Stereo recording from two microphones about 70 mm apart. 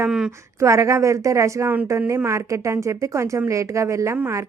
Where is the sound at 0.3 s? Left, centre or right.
Right.